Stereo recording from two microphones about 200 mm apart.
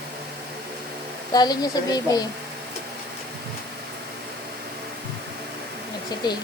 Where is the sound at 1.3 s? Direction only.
20° left (ahead or behind).